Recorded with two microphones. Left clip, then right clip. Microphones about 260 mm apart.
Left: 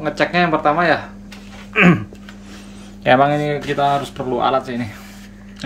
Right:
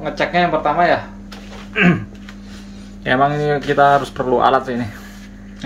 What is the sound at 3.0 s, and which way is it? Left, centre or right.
Speech, centre.